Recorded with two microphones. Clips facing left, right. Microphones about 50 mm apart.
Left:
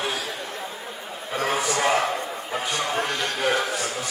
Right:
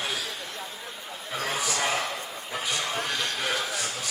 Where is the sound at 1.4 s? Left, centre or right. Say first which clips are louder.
Left 6 dB; left.